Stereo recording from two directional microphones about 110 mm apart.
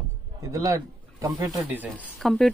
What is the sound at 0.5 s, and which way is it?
Speech, 30° right (ahead or behind).